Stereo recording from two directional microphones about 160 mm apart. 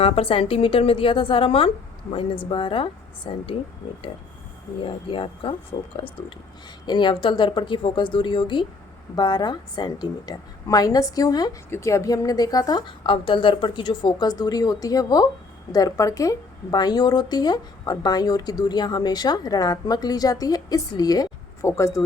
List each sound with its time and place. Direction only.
0.0 s a woman's voice: 35° left (ahead or behind)
4.8 s a woman's voice: 35° left (ahead or behind)
6.8 s a woman's voice: 30° left (ahead or behind)